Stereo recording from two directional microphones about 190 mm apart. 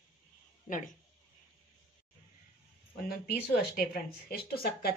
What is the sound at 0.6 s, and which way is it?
Speech, 45° left (ahead or behind).